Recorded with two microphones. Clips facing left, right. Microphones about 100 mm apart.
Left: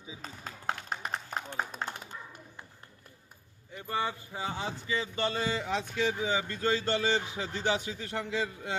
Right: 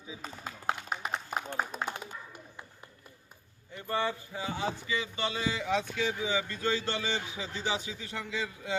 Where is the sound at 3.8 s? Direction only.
20° left (ahead or behind).